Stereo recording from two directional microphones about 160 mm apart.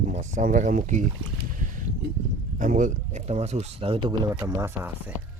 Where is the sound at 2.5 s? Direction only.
55° right (ahead or behind); by 4.2 s 35° right (ahead or behind).